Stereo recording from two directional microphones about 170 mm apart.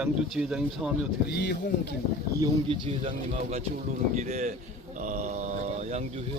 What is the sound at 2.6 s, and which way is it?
Speech, 30° right (ahead or behind).